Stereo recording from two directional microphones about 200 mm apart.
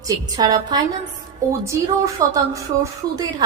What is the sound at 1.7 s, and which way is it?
Speech, 15° right (ahead or behind).